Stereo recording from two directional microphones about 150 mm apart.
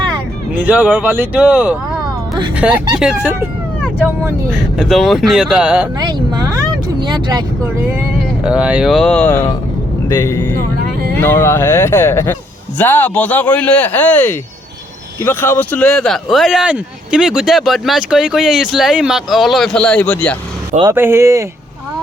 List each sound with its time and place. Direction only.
0.6 s speech: 10° right (ahead or behind)
4.5 s speech: 5° right (ahead or behind)
6.0 s speech: 30° right (ahead or behind)
8.4 s speech: 5° right (ahead or behind); by 20.3 s 10° left (ahead or behind)
20.8 s speech: 15° right (ahead or behind)